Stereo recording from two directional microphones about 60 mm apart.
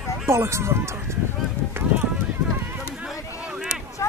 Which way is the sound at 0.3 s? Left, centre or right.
Right.